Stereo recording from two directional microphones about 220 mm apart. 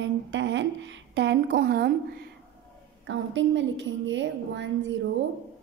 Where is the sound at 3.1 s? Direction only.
55° right (ahead or behind).